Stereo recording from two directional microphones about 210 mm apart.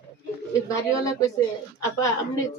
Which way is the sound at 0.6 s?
15° left (ahead or behind).